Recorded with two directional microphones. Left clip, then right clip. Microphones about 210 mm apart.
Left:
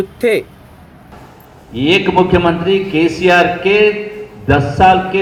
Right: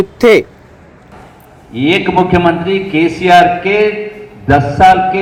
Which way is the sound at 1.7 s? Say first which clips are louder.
Right 1 dB; 45° right (ahead or behind).